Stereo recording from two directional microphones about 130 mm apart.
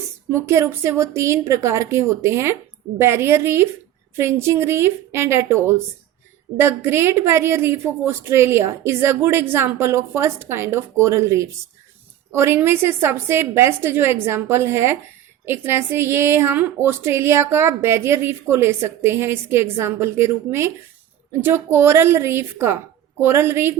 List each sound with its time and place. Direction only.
0.3 s a woman's voice: 20° right (ahead or behind)